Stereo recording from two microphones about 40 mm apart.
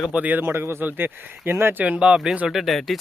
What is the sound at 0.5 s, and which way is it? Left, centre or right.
Speech, right.